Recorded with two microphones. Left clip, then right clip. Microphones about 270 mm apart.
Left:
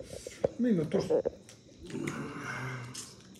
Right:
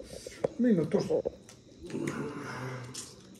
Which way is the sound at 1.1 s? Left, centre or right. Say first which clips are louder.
Left 1 dB; right.